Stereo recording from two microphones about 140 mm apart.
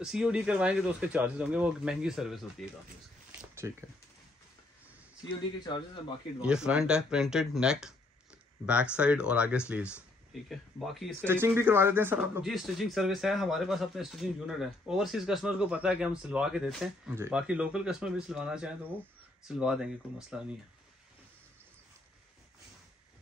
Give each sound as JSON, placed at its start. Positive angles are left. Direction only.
{"t": 0.0, "sound": "speech", "side_deg": -5}
{"t": 3.3, "sound": "a sound", "side_deg": -15}
{"t": 5.6, "sound": "speech", "side_deg": 35}
{"t": 6.4, "sound": "speech", "side_deg": -5}
{"t": 11.2, "sound": "speech", "side_deg": -15}
{"t": 12.4, "sound": "speech", "side_deg": 0}
{"t": 17.1, "sound": "speech", "side_deg": -10}